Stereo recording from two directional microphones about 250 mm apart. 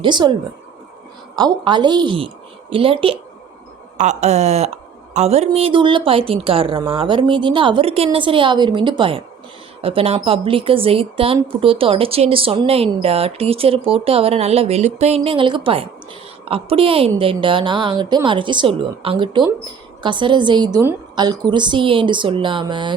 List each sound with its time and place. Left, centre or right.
0.0 s speech: centre
1.4 s speech: centre